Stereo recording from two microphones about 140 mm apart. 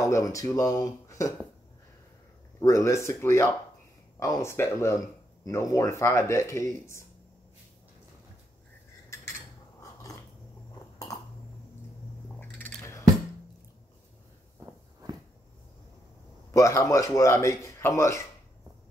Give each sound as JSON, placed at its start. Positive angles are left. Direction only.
{"t": 0.0, "sound": "speech", "side_deg": 25}
{"t": 2.6, "sound": "speech", "side_deg": 20}
{"t": 12.5, "sound": "a sound", "side_deg": 15}
{"t": 16.5, "sound": "speech", "side_deg": 20}